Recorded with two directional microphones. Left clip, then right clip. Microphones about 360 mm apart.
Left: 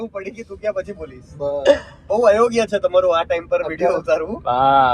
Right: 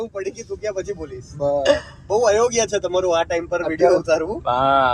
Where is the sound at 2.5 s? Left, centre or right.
Centre.